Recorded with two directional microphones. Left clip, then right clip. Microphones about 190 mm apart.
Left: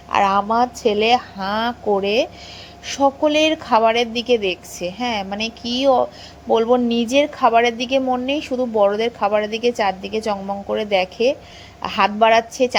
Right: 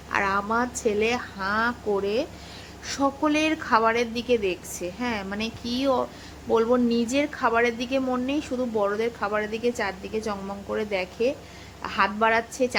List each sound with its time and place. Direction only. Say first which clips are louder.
0.1 s a woman's voice: left 8 dB; 20° left (ahead or behind)